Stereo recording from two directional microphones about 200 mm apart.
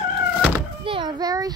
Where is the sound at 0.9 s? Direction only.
25° right (ahead or behind).